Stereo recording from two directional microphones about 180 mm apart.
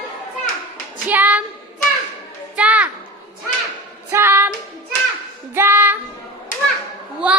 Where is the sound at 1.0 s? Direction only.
10° right (ahead or behind).